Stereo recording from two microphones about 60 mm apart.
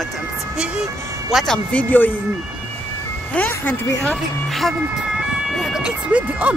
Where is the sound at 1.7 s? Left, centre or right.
Left.